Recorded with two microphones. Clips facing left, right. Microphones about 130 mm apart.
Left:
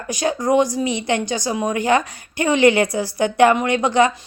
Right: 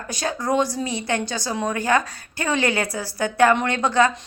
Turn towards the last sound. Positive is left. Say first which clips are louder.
# left 3 dB
turn(degrees=15)  # may be behind; listen again after turning